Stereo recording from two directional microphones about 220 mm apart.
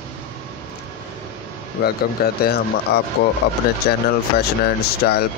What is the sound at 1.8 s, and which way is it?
Speech, 45° left (ahead or behind).